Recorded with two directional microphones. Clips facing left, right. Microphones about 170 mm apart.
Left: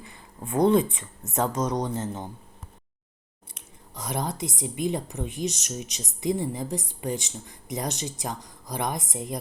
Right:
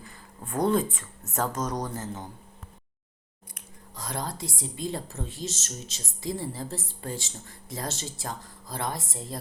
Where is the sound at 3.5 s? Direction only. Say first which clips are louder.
Left 2 dB; 20° left (ahead or behind).